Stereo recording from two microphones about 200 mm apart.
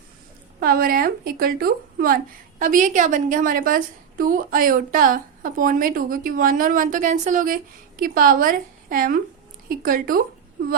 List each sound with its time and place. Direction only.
0.6 s a woman's voice: 45° right (ahead or behind)